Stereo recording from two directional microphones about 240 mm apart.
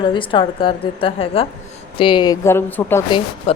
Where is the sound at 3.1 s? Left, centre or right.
Left.